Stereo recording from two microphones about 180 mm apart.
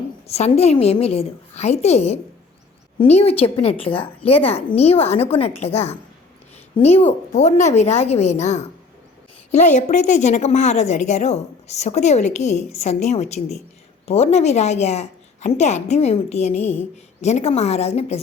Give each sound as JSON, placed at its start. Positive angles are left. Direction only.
{"t": 0.3, "sound": "a woman's voice", "side_deg": 35}